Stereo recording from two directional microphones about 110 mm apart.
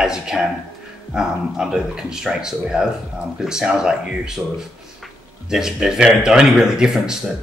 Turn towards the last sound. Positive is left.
turn(degrees=-5)  # may be behind; listen again after turning